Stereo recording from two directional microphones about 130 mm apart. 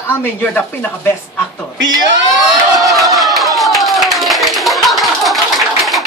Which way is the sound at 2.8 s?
Centre (ahead or behind).